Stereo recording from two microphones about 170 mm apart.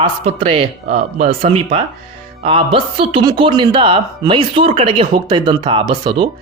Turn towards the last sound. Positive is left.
turn(degrees=-25)  # may be behind; listen again after turning